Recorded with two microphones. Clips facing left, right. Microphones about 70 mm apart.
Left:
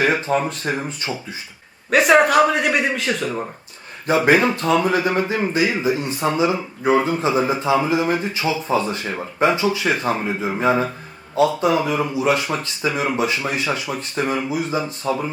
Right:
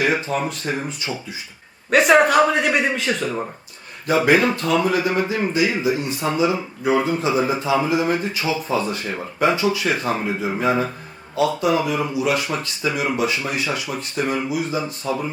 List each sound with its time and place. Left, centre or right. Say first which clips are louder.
0.0 s speech: left 2 dB; left
1.1 s a man's voice: left 1 dB; centre
4.3 s speech: left 2 dB; left
6.2 s speech: left 1 dB; centre
15.0 s speech: left 2 dB; centre